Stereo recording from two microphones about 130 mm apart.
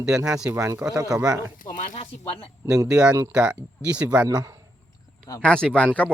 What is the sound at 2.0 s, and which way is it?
Speech, 45° left (ahead or behind).